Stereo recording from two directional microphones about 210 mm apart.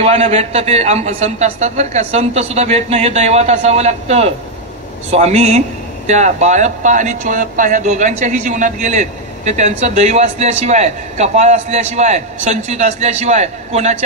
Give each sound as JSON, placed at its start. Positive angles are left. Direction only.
{"t": 0.0, "sound": "speech", "side_deg": -30}